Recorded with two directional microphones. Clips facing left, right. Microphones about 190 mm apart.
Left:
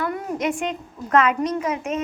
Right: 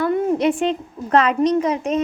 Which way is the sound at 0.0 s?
30° right (ahead or behind).